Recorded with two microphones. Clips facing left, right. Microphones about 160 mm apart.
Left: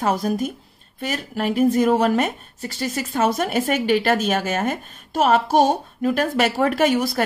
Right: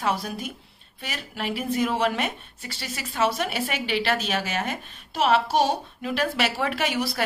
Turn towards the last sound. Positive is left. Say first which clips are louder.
# left 8 dB
turn(degrees=45)  # may be behind; listen again after turning